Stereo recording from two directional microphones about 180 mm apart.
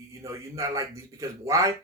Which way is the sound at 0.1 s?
15° right (ahead or behind).